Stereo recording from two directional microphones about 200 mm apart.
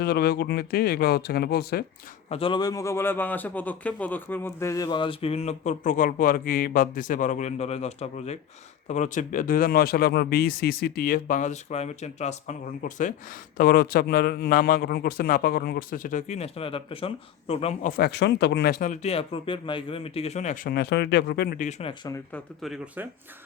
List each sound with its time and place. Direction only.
0.0 s a man's voice: 50° left (ahead or behind)
2.3 s a man's voice: 25° left (ahead or behind)
17.9 s a man's voice: 55° left (ahead or behind)
21.6 s a man's voice: 35° left (ahead or behind)
22.6 s speech: centre (ahead or behind)